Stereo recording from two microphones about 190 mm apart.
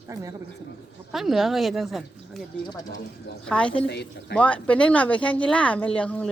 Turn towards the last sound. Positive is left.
turn(degrees=5)  # may be behind; listen again after turning